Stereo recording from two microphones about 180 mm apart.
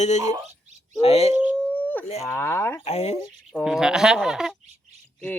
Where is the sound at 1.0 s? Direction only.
35° left (ahead or behind).